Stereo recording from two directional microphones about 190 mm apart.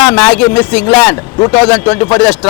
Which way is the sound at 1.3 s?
20° left (ahead or behind).